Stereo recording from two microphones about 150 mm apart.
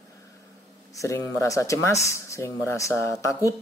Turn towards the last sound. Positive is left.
turn(degrees=20)  # may be behind; listen again after turning